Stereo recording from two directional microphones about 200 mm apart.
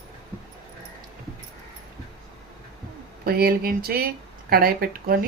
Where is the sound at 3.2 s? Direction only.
50° right (ahead or behind).